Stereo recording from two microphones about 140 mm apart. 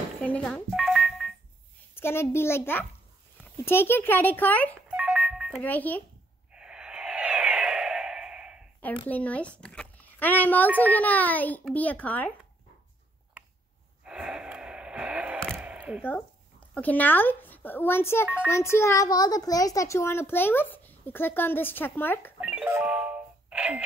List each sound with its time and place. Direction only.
0.2 s a sound: 10° left (ahead or behind)
2.0 s a child's voice: 15° left (ahead or behind)
4.9 s music: 10° right (ahead or behind)
5.6 s a child's voice: 10° left (ahead or behind)
6.5 s a sound: 5° right (ahead or behind)
9.0 s a child's voice: 10° left (ahead or behind)
14.0 s a sound: 5° right (ahead or behind)
16.1 s a child's voice: 10° left (ahead or behind)
22.4 s music: 10° right (ahead or behind)